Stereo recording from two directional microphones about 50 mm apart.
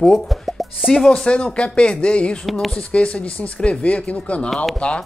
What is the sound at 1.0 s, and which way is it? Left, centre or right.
Speech, centre.